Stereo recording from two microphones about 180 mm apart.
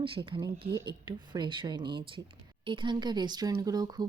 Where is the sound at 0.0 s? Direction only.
25° right (ahead or behind).